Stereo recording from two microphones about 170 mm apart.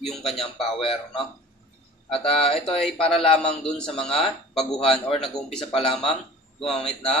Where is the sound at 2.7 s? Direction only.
5° left (ahead or behind).